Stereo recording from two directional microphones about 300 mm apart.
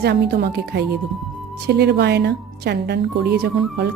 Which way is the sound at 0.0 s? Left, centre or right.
Right.